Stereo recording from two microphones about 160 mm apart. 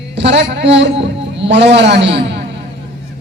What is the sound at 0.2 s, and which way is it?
A man's voice, 90° right.